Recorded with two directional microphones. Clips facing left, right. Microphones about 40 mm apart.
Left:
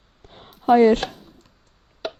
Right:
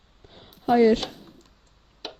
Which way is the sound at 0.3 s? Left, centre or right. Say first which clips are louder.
Left 4 dB; left.